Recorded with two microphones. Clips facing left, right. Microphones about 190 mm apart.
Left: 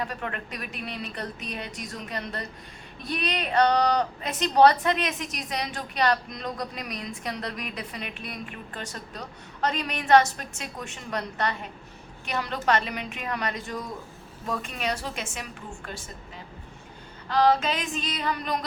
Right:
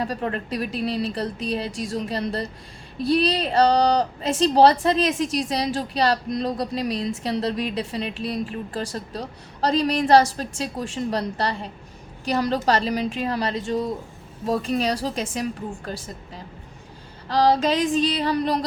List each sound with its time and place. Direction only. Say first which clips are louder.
0.0 s a woman's voice: right 6 dB; 35° right (ahead or behind)
17.2 s a woman's voice: right 3 dB; 35° right (ahead or behind)